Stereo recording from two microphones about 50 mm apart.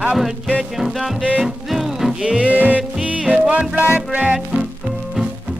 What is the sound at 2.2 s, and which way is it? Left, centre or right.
Music, centre.